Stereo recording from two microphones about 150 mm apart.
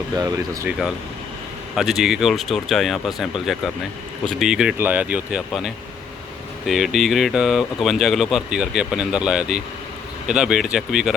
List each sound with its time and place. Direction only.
0.2 s speech: 25° right (ahead or behind)
1.7 s speech: centre (ahead or behind)